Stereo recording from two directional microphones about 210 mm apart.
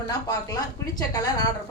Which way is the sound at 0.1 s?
20° left (ahead or behind).